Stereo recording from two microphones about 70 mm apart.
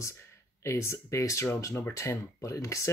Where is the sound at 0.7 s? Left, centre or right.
Left.